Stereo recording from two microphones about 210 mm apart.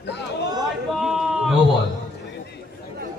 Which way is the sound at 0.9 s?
Centre (ahead or behind).